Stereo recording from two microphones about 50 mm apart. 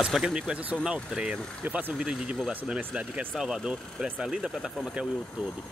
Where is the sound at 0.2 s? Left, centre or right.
Centre.